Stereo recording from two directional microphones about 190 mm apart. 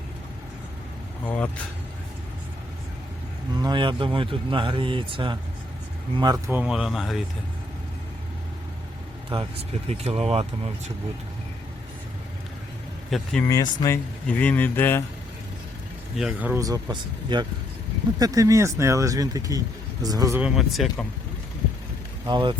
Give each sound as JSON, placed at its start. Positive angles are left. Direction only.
{"t": 1.2, "sound": "speech", "side_deg": 5}
{"t": 3.6, "sound": "speech", "side_deg": -25}
{"t": 6.6, "sound": "speech", "side_deg": -5}
{"t": 9.9, "sound": "speech", "side_deg": -35}
{"t": 13.1, "sound": "speech", "side_deg": 0}
{"t": 13.5, "sound": "speech", "side_deg": 15}
{"t": 16.1, "sound": "speech", "side_deg": -5}
{"t": 20.4, "sound": "speech", "side_deg": 0}
{"t": 22.3, "sound": "speech", "side_deg": -25}